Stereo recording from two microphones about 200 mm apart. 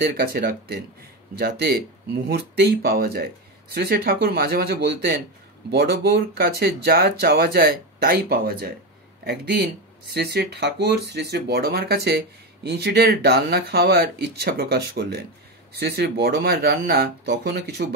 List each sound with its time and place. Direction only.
0.0 s speech: 50° right (ahead or behind)